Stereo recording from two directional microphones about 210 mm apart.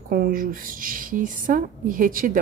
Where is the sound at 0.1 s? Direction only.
45° right (ahead or behind).